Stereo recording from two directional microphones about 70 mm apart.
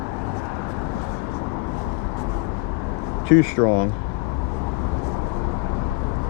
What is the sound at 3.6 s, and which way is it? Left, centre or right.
Speech, centre.